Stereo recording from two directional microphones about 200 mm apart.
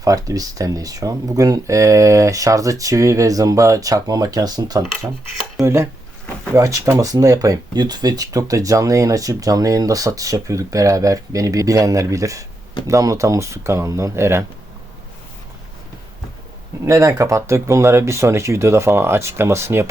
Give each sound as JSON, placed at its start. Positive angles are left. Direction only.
{"t": 0.0, "sound": "speech", "side_deg": -15}
{"t": 16.8, "sound": "speech", "side_deg": -15}